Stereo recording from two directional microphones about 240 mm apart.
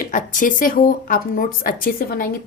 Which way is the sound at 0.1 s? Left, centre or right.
Left.